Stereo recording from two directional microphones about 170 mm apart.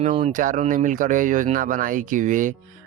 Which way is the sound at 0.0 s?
35° right (ahead or behind).